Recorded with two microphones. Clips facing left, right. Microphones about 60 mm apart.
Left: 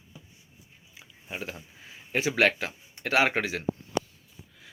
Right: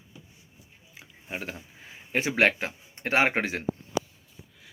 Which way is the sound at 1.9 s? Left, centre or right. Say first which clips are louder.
Even; right.